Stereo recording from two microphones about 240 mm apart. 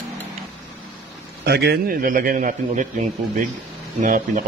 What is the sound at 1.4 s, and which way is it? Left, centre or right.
A man's voice, right.